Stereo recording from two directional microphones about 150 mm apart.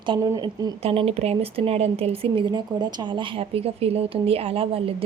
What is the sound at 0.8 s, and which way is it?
Speech, 40° right (ahead or behind).